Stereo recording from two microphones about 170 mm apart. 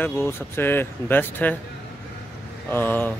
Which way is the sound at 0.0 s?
15° left (ahead or behind).